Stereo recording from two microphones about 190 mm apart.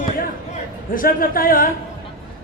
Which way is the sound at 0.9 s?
50° left (ahead or behind).